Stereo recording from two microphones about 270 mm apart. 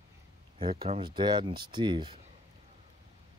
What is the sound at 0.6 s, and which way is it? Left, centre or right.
Speech, centre.